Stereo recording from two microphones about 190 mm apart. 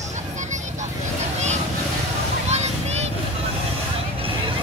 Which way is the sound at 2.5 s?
35° right (ahead or behind).